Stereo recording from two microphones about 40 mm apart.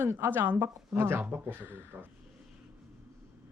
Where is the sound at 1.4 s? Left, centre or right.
Right.